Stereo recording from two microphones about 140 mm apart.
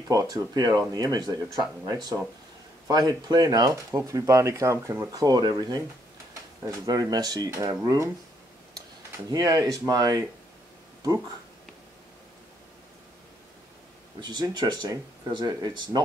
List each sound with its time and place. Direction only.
0.1 s speech: 25° right (ahead or behind)
2.9 s speech: 30° right (ahead or behind)
6.6 s speech: 25° right (ahead or behind)
9.3 s speech: 25° right (ahead or behind)
14.2 s speech: 30° right (ahead or behind)